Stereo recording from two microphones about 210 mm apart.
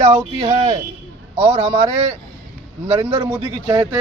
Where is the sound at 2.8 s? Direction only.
25° right (ahead or behind).